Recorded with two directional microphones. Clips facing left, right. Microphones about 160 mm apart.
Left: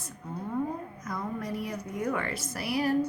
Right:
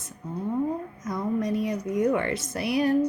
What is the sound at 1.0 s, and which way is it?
Speech, 20° right (ahead or behind).